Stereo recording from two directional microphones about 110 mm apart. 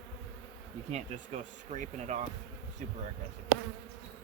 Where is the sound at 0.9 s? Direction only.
90° right.